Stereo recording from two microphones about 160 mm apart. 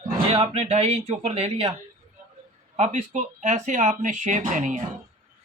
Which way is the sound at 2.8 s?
50° right (ahead or behind).